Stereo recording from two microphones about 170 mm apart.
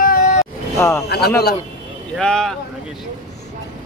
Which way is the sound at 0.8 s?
15° left (ahead or behind).